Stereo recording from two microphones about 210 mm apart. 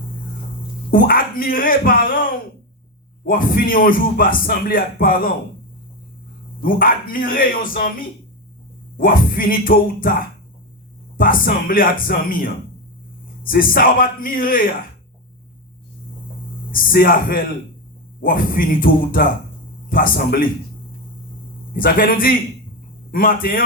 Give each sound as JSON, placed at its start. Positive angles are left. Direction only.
{"t": 0.9, "sound": "a man's voice", "side_deg": 45}
{"t": 3.2, "sound": "a man's voice", "side_deg": 45}
{"t": 6.6, "sound": "a man's voice", "side_deg": 45}
{"t": 9.0, "sound": "a man's voice", "side_deg": 45}
{"t": 16.7, "sound": "a man's voice", "side_deg": 45}
{"t": 21.7, "sound": "a man's voice", "side_deg": 45}